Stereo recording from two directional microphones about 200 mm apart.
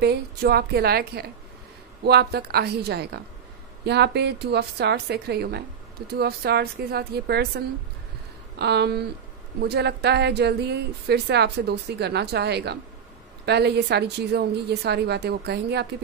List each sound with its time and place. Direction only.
0.0 s a woman's voice: 50° right (ahead or behind)